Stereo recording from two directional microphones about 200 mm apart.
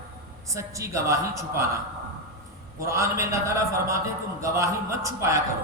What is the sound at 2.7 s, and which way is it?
A man's voice, 15° right (ahead or behind).